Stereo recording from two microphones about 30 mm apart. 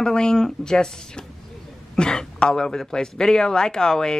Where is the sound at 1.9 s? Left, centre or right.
Left.